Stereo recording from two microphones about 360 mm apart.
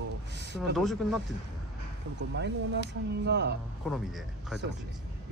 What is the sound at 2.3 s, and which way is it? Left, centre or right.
Speech, right.